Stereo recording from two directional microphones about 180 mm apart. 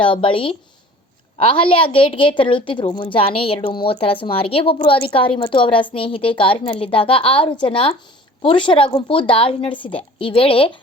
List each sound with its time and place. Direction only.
0.0 s a woman's voice: 30° left (ahead or behind)